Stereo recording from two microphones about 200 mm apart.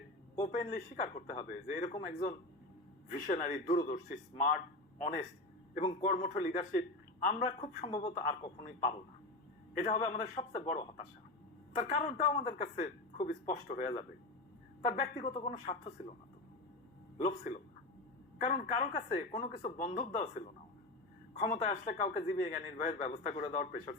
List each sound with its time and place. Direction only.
0.3 s a man's voice: 35° left (ahead or behind)
3.1 s a man's voice: 40° left (ahead or behind)
6.2 s a man's voice: 35° left (ahead or behind)
15.2 s speech: 25° left (ahead or behind)
15.4 s a man's voice: 40° left (ahead or behind)
17.2 s a man's voice: 35° left (ahead or behind)
18.6 s a man's voice: 40° left (ahead or behind)